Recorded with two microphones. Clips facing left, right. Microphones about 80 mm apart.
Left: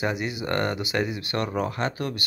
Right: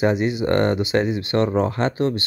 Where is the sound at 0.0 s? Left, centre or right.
Right.